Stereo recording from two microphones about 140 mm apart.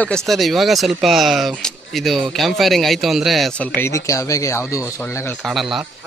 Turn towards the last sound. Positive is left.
turn(degrees=0)  # may be behind; listen again after turning